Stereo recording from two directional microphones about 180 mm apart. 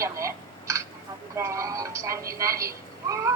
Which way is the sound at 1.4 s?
15° right (ahead or behind).